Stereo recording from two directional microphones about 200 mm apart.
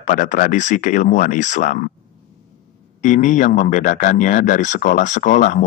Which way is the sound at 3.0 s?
40° left (ahead or behind).